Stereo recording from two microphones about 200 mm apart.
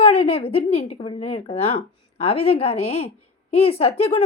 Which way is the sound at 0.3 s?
30° left (ahead or behind).